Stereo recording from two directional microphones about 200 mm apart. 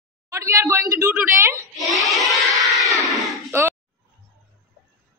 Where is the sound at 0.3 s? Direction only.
15° right (ahead or behind).